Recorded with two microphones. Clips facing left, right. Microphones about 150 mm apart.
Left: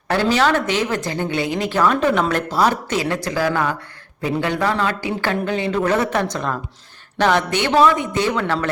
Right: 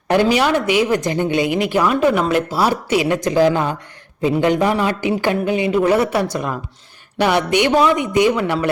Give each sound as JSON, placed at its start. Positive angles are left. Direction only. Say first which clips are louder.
{"t": 0.1, "sound": "a woman's voice", "louder": "right 2 dB", "side_deg": -15}